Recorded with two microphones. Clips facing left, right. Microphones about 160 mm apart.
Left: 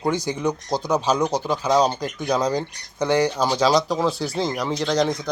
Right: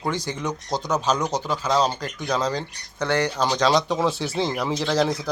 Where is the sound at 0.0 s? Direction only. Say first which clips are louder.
Left 4 dB; 15° left (ahead or behind).